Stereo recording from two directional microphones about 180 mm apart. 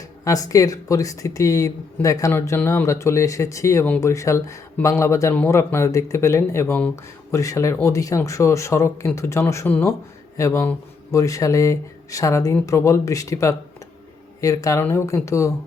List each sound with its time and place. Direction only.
0.3 s speech: 20° left (ahead or behind)